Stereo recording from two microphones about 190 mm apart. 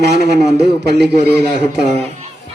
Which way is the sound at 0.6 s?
60° right (ahead or behind).